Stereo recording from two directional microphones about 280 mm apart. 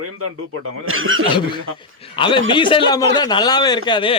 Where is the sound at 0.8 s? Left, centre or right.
Right.